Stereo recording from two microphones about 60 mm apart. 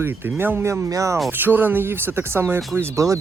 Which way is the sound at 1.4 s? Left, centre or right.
Right.